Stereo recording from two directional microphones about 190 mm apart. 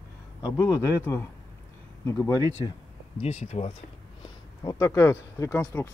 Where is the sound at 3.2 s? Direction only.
35° left (ahead or behind).